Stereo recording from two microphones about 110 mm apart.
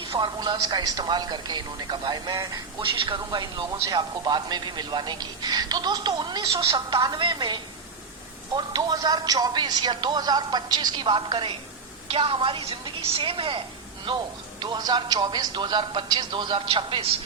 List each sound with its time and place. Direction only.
0.1 s speech: 45° right (ahead or behind)
12.0 s speech: 60° right (ahead or behind)
14.6 s speech: 40° right (ahead or behind)